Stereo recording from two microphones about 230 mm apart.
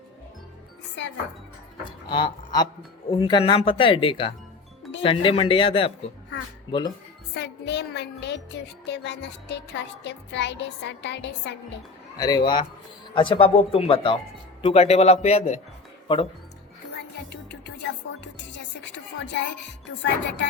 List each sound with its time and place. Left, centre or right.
1.8 s speech: left
7.3 s music: left
12.1 s a man's voice: centre
17.5 s music: left